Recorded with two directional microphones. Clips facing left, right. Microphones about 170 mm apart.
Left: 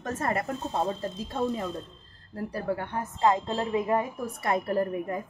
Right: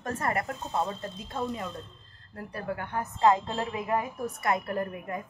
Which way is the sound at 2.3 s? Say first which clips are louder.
Left 5 dB; 30° left (ahead or behind).